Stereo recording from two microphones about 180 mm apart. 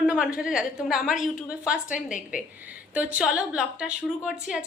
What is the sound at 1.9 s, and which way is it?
Speech, 45° left (ahead or behind).